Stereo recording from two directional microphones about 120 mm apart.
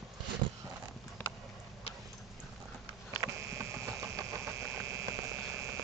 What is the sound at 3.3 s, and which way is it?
Engine, 20° right (ahead or behind).